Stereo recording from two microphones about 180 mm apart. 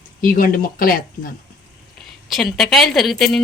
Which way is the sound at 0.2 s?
50° left (ahead or behind).